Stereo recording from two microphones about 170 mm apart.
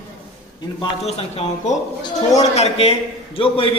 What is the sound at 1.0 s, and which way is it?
A man's voice, 40° left (ahead or behind).